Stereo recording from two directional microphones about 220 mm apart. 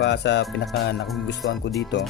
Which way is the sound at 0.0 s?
50° left (ahead or behind).